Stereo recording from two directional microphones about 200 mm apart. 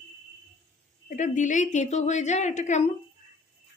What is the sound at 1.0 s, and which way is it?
A woman's voice, 40° left (ahead or behind).